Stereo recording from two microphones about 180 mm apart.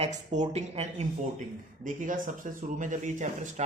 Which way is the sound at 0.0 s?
35° right (ahead or behind).